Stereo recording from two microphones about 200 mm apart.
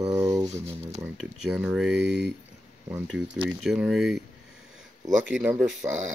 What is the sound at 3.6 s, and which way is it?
Speech, centre (ahead or behind).